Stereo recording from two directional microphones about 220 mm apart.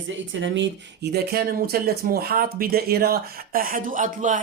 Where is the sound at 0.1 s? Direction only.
60° right (ahead or behind).